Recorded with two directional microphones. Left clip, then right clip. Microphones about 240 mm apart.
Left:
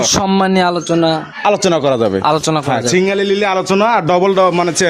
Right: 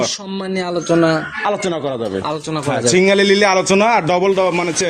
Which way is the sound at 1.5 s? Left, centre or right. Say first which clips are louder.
Left 9 dB; left.